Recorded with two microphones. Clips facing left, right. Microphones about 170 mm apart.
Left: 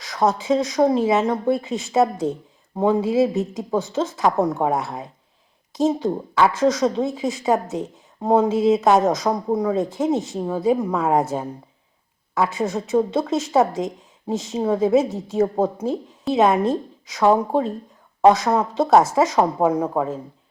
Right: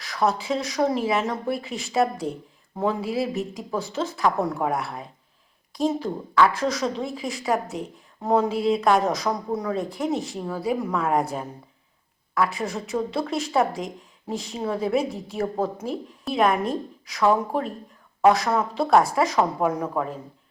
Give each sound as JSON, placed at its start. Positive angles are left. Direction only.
{"t": 0.0, "sound": "a woman's voice", "side_deg": 20}